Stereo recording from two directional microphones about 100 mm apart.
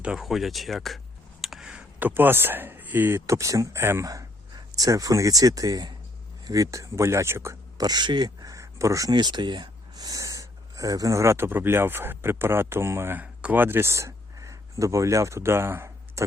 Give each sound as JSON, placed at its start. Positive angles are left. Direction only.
{"t": 0.0, "sound": "speech", "side_deg": -5}
{"t": 1.4, "sound": "a sound", "side_deg": -5}
{"t": 2.0, "sound": "speech", "side_deg": -20}
{"t": 7.8, "sound": "speech", "side_deg": -45}
{"t": 9.1, "sound": "speech", "side_deg": -45}